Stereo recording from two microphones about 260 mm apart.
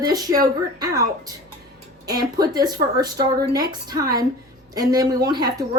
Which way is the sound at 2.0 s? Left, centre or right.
Centre.